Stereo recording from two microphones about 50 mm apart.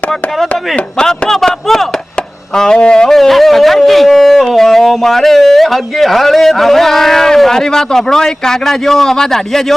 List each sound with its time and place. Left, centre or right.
0.9 s speech: centre
2.6 s speech: centre
3.2 s speech: centre